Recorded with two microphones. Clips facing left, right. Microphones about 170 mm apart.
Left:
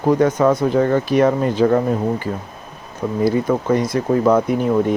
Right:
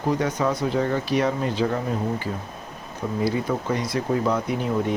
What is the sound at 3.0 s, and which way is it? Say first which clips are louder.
Speech: left 6 dB; 65° left (ahead or behind).